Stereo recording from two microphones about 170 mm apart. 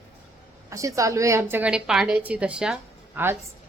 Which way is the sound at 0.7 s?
20° right (ahead or behind).